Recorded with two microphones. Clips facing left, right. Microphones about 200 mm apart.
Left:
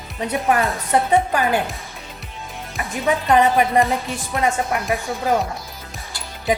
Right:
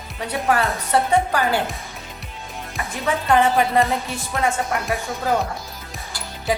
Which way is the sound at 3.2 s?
20° left (ahead or behind).